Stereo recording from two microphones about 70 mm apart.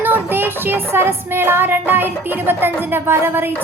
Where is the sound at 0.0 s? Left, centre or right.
Right.